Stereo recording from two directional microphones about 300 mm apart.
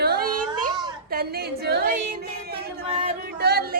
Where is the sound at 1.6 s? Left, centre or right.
Right.